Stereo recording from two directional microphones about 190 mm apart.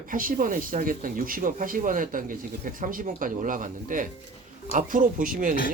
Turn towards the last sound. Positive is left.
turn(degrees=-45)  # may be behind; listen again after turning